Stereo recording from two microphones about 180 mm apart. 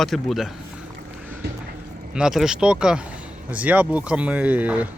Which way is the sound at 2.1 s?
5° right (ahead or behind).